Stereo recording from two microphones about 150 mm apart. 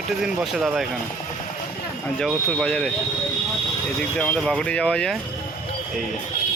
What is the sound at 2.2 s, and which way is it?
Speech, 5° left (ahead or behind).